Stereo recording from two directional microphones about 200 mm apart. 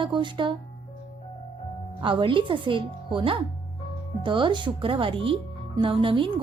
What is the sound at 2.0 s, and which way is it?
Speech, 25° right (ahead or behind).